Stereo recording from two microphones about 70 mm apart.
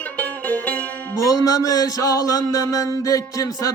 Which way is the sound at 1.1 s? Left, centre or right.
Left.